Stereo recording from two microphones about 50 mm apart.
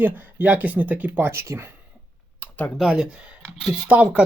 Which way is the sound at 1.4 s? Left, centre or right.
Right.